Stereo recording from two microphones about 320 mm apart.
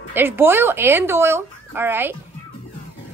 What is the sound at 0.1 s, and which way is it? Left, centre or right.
Speech, centre.